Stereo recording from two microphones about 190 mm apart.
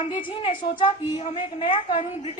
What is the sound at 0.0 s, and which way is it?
A woman's voice, 25° left (ahead or behind).